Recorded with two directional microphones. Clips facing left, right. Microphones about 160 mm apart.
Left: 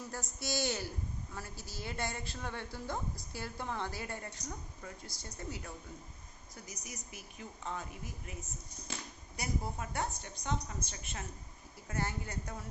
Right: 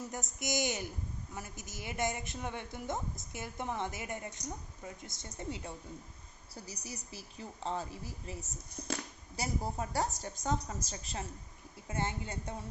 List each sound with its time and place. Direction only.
0.1 s a woman's voice: 20° right (ahead or behind)
6.8 s a woman's voice: 35° right (ahead or behind)